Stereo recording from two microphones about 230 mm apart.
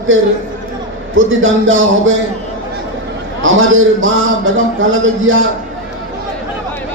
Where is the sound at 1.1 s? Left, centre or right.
Right.